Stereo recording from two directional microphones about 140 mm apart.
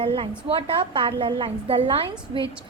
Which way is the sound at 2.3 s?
30° right (ahead or behind).